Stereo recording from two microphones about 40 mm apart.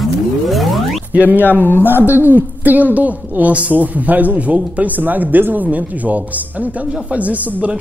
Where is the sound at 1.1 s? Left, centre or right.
Right.